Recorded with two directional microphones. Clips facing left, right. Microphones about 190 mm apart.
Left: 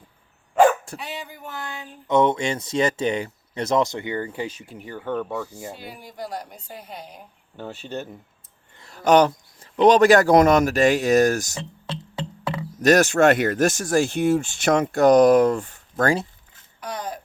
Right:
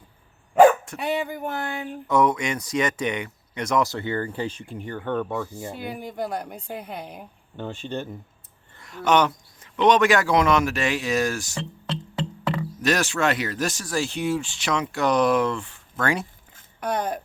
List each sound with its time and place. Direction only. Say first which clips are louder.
0.9 s a woman's voice: right 8 dB; 55° right (ahead or behind)
2.0 s speech: left 2 dB; 25° left (ahead or behind); by 5.5 s 5° left (ahead or behind)
5.7 s a woman's voice: right 6 dB; 55° right (ahead or behind)
7.5 s speech: right 1 dB; 5° left (ahead or behind)
8.8 s a man's voice: left 4 dB; 35° left (ahead or behind)
12.8 s speech: left 8 dB; 45° left (ahead or behind)
16.8 s a woman's voice: right 5 dB; 55° right (ahead or behind)